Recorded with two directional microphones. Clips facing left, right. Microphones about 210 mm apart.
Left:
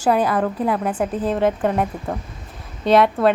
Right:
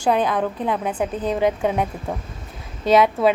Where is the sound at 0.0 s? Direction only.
5° left (ahead or behind).